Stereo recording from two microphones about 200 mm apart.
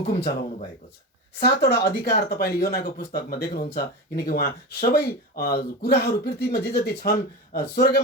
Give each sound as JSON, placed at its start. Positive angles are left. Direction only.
{"t": 1.4, "sound": "speech", "side_deg": 55}